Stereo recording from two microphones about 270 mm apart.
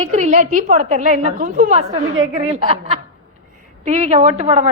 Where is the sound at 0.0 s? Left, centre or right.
Right.